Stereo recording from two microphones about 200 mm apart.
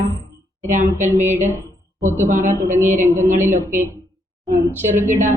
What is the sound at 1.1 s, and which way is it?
A woman's voice, 10° right (ahead or behind).